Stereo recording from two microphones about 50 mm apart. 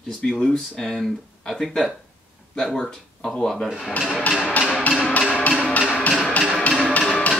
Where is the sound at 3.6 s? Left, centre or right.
Centre.